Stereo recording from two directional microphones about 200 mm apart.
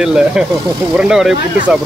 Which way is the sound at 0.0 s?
5° right (ahead or behind).